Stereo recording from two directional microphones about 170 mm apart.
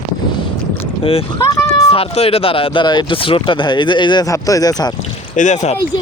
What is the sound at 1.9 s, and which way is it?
Speech, 35° left (ahead or behind).